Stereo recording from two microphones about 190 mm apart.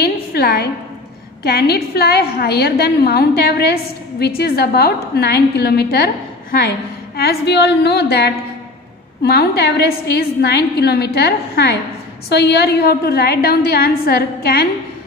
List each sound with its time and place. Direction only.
0.0 s a woman's voice: 55° left (ahead or behind)